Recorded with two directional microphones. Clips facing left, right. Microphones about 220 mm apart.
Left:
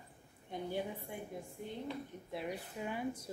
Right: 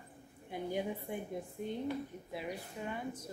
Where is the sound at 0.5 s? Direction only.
5° right (ahead or behind).